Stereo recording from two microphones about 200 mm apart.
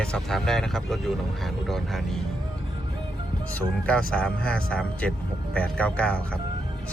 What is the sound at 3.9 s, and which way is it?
Speech, 5° left (ahead or behind).